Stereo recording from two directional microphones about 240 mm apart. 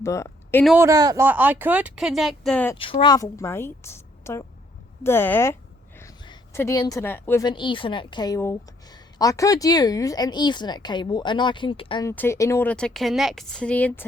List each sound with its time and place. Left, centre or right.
0.0 s a sound: centre
0.6 s speech: centre
0.9 s speech: centre
2.7 s a woman's voice: left
12.1 s speech: centre